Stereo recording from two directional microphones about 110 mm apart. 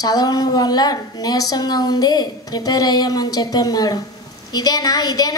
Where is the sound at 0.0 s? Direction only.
35° left (ahead or behind).